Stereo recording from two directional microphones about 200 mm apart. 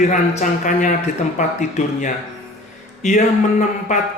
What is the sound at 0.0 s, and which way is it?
Speech, 40° left (ahead or behind).